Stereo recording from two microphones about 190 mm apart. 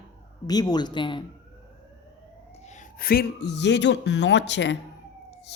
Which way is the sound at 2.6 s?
40° left (ahead or behind).